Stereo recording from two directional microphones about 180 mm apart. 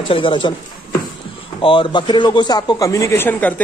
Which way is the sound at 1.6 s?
25° left (ahead or behind).